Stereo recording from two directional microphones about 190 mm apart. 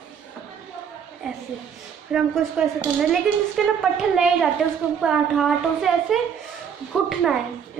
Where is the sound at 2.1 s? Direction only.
5° right (ahead or behind).